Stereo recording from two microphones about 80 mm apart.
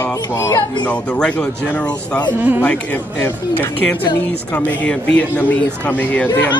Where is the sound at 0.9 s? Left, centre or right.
Centre.